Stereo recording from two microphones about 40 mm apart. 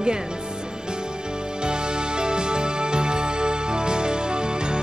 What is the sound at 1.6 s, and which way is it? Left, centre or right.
Music, right.